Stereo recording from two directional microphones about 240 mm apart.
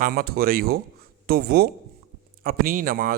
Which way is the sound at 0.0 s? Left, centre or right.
Right.